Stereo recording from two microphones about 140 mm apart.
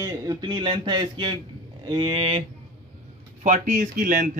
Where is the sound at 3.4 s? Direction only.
60° right (ahead or behind).